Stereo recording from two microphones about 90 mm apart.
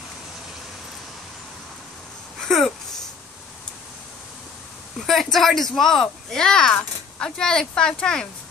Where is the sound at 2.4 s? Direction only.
5° left (ahead or behind).